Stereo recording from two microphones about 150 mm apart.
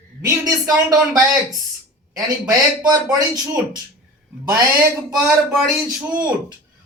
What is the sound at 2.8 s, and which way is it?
Speech, 25° right (ahead or behind).